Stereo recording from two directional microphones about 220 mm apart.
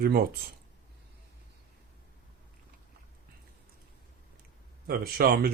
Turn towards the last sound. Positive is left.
turn(degrees=-45)  # may be behind; listen again after turning